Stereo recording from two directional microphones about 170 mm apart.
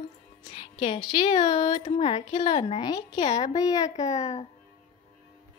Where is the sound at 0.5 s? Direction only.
30° left (ahead or behind).